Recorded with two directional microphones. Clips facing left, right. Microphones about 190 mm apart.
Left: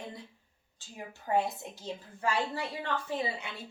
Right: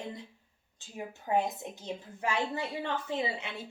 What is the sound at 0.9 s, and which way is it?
A woman's voice, 20° right (ahead or behind).